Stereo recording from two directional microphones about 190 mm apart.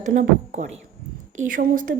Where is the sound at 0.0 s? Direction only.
40° right (ahead or behind).